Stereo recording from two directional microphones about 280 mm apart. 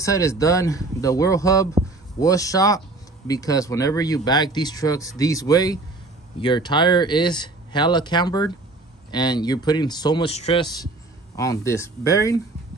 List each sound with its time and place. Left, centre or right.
0.0 s speech: centre